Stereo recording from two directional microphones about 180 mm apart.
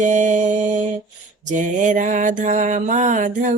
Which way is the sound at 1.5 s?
45° right (ahead or behind).